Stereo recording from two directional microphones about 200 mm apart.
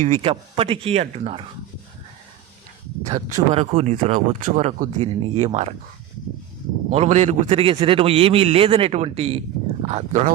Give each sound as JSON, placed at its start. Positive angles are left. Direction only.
{"t": 0.0, "sound": "a man's voice", "side_deg": -30}
{"t": 3.1, "sound": "speech", "side_deg": -30}
{"t": 6.9, "sound": "a man's voice", "side_deg": -35}